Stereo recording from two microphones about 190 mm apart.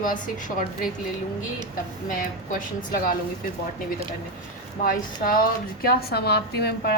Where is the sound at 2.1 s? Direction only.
45° left (ahead or behind).